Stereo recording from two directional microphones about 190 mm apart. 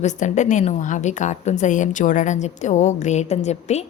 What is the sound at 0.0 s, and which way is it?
A woman's voice, 40° left (ahead or behind).